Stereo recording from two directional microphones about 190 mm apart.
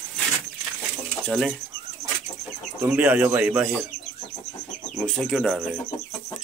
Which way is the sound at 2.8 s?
5° right (ahead or behind).